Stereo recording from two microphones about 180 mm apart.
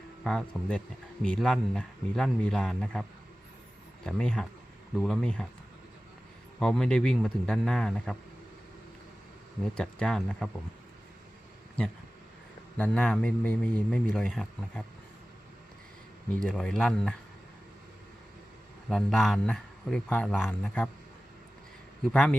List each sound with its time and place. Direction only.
0.3 s speech: 5° left (ahead or behind)
6.6 s speech: 5° left (ahead or behind)
9.7 s speech: 5° left (ahead or behind)
12.7 s a man's voice: 5° left (ahead or behind)
16.3 s speech: 5° left (ahead or behind)
18.9 s speech: centre (ahead or behind)
22.0 s speech: 5° left (ahead or behind)